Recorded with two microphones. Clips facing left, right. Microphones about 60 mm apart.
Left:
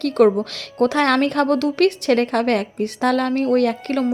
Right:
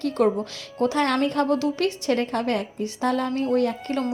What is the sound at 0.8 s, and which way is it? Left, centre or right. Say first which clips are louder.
A woman's voice: left 5 dB; left.